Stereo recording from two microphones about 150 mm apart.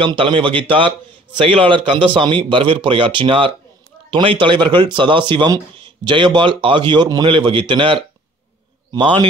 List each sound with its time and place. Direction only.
0.0 s speech: 35° right (ahead or behind)